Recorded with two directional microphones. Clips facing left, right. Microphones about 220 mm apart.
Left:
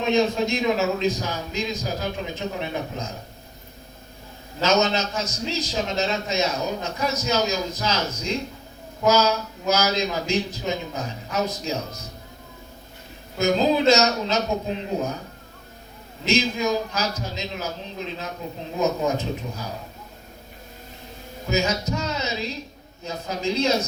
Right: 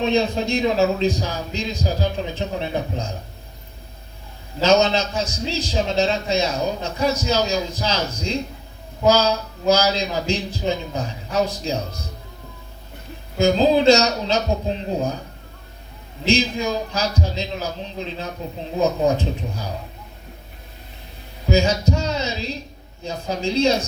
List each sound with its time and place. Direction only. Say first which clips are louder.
0.0 s a man's voice: right 1 dB; 30° right (ahead or behind)
4.6 s a man's voice: right 4 dB; 30° right (ahead or behind)
13.4 s a man's voice: right 4 dB; 30° right (ahead or behind)
16.2 s a man's voice: right 2 dB; 30° right (ahead or behind)
21.5 s a sound: right 5 dB; 30° right (ahead or behind)
23.0 s a man's voice: right 2 dB; 30° right (ahead or behind)